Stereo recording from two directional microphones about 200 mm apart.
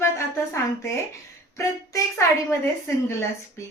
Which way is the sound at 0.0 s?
15° left (ahead or behind).